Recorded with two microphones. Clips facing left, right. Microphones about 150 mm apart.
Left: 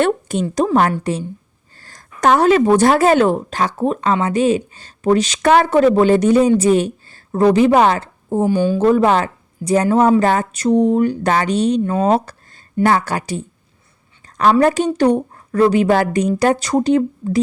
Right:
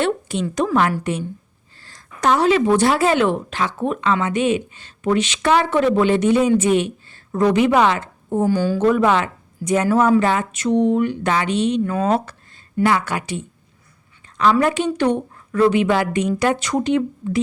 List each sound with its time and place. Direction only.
0.0 s a sound: 45° left (ahead or behind)
0.4 s a woman's voice: 35° left (ahead or behind)
8.4 s a woman's voice: 20° left (ahead or behind)
8.8 s a woman's voice: 35° left (ahead or behind)
11.8 s a woman's voice: 30° left (ahead or behind)
14.6 s a woman's voice: 40° left (ahead or behind)